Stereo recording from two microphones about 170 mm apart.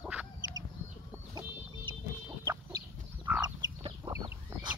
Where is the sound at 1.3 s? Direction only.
25° right (ahead or behind).